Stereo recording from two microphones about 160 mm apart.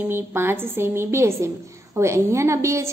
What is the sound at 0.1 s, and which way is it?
A woman's voice, 15° right (ahead or behind).